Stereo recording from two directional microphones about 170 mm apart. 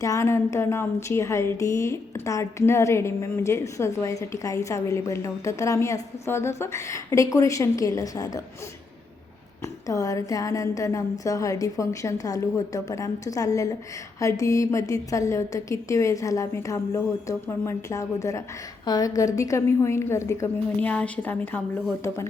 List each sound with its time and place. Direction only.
0.0 s a woman's voice: 15° left (ahead or behind)
9.8 s a woman's voice: 20° left (ahead or behind)